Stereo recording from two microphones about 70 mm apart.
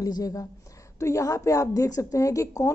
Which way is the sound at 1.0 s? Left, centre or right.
Left.